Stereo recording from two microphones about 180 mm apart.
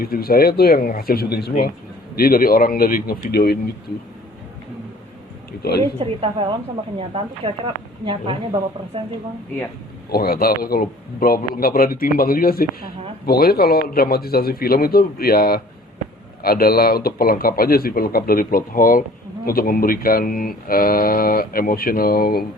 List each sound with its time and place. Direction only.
0.0 s a man's voice: 55° left (ahead or behind)
6.0 s a woman's voice: 30° right (ahead or behind)
10.1 s a man's voice: 55° left (ahead or behind)